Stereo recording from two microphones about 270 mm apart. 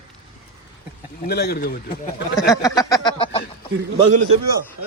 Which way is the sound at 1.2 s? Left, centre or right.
Left.